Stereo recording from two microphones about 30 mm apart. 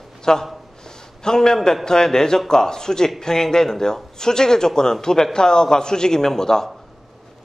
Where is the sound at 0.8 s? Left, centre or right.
Left.